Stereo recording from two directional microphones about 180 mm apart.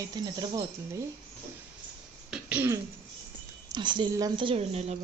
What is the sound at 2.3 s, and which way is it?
Throat clearing, 10° right (ahead or behind).